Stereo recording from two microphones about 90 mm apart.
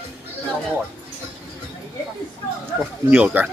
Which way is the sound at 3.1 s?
15° right (ahead or behind).